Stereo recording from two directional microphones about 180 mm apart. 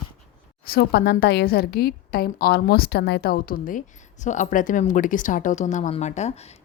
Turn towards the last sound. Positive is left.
turn(degrees=40)  # may be behind; listen again after turning